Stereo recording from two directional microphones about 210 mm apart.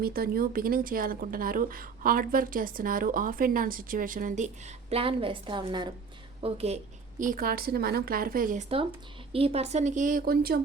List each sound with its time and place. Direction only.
0.0 s a woman's voice: 45° right (ahead or behind); by 6.7 s 30° right (ahead or behind)
7.2 s a woman's voice: 40° right (ahead or behind)
9.3 s speech: 30° right (ahead or behind); by 10.6 s 45° right (ahead or behind)